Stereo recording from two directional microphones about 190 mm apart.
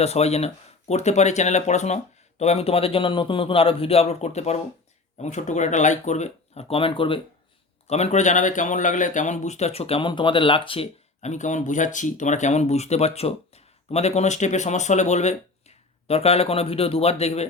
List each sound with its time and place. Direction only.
0.0 s speech: 35° left (ahead or behind)